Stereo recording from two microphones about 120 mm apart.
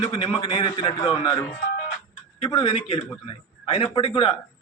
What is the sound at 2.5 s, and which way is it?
Speech, 40° left (ahead or behind).